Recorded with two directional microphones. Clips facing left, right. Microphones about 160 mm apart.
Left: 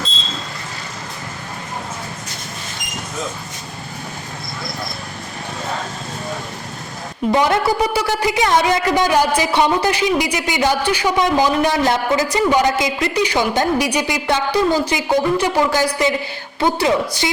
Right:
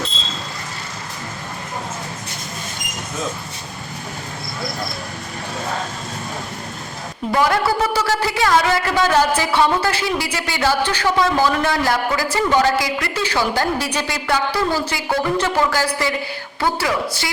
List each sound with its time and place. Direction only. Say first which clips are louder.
7.3 s a woman's voice: left 1 dB; 20° left (ahead or behind)